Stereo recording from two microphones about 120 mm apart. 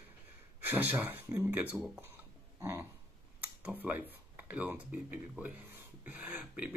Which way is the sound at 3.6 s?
15° right (ahead or behind).